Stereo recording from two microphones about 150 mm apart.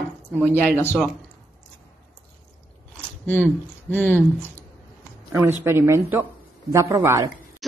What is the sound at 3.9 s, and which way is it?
Speech, 10° left (ahead or behind).